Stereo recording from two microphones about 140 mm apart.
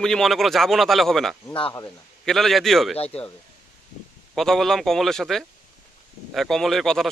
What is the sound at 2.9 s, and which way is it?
Speech, 45° left (ahead or behind).